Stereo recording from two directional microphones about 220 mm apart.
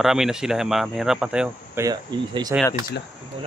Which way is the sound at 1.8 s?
15° right (ahead or behind).